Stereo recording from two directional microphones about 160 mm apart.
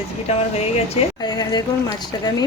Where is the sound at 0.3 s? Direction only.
40° left (ahead or behind).